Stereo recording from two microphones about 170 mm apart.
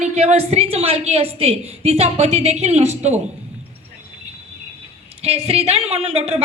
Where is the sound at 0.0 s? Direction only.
40° right (ahead or behind).